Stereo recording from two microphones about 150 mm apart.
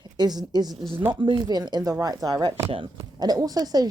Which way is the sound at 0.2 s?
30° right (ahead or behind).